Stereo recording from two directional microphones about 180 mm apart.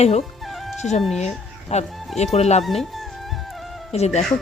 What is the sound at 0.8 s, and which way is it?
A woman's voice, 40° left (ahead or behind).